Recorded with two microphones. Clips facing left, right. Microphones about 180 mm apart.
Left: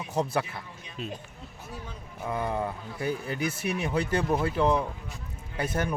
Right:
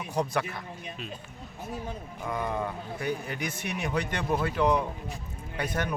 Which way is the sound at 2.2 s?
25° left (ahead or behind).